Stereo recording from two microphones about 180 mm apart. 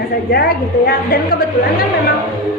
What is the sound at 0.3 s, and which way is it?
A woman's voice, 60° left (ahead or behind).